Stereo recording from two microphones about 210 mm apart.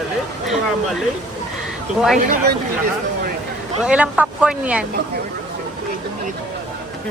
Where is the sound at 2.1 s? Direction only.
40° right (ahead or behind).